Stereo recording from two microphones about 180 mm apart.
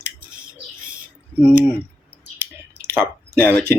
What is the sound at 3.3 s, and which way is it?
Speech, 5° left (ahead or behind).